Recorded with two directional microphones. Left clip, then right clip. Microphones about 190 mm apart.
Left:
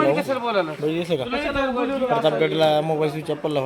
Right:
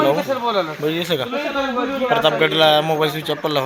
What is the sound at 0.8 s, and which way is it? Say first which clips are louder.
Speech: right 3 dB; centre (ahead or behind).